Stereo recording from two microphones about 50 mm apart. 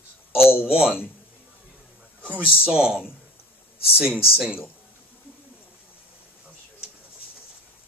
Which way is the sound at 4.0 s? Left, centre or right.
Right.